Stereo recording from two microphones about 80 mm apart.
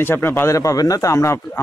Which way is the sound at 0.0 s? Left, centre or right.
Left.